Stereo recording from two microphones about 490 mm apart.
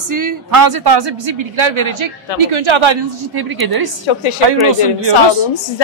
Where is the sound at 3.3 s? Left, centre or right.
Right.